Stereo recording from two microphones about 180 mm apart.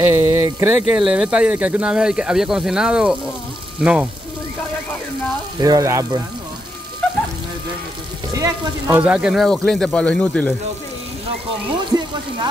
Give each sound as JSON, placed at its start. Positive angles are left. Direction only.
{"t": 0.0, "sound": "speech", "side_deg": -15}
{"t": 3.8, "sound": "frying", "side_deg": -5}
{"t": 5.6, "sound": "speech", "side_deg": -20}
{"t": 8.3, "sound": "frying", "side_deg": -20}
{"t": 8.9, "sound": "speech", "side_deg": -5}